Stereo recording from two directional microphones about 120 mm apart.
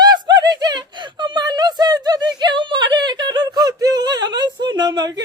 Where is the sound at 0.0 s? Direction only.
35° right (ahead or behind).